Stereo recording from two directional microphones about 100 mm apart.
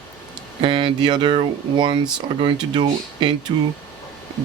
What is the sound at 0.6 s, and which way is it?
Speech, 55° right (ahead or behind).